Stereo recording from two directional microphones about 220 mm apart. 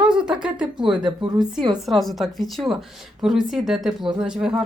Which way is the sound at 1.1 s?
20° right (ahead or behind).